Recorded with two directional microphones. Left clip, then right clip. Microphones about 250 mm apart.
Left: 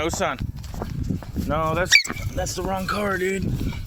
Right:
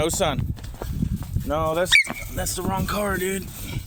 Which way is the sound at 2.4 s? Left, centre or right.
Centre.